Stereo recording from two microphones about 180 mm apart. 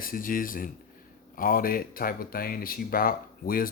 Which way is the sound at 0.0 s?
50° left (ahead or behind).